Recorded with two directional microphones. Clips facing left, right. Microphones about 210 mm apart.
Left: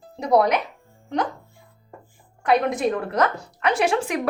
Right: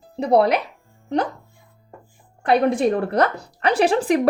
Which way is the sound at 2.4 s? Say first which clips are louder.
Right 3 dB; 30° right (ahead or behind).